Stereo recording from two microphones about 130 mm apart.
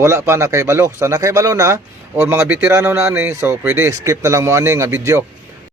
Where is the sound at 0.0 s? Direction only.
20° right (ahead or behind).